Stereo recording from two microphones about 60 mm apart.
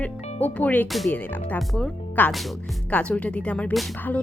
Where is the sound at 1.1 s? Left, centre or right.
Left.